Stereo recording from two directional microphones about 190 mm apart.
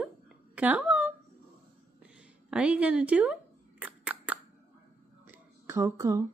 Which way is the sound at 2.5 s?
5° right (ahead or behind).